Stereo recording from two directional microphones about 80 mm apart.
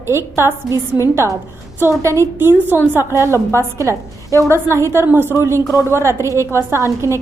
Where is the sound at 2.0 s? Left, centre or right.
Right.